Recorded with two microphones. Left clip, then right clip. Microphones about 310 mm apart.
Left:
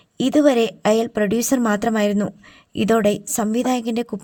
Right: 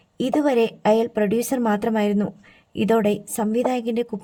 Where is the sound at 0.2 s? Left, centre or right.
Left.